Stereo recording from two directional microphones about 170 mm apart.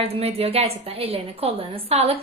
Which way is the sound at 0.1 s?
35° right (ahead or behind).